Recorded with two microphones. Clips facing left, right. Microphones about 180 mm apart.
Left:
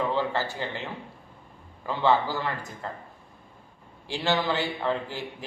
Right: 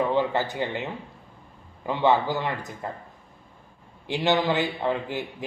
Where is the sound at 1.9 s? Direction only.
20° right (ahead or behind).